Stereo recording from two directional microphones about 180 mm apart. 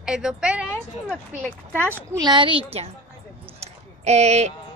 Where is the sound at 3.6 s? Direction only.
40° right (ahead or behind).